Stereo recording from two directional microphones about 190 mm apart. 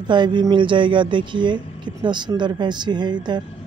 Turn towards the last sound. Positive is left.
turn(degrees=-25)  # may be behind; listen again after turning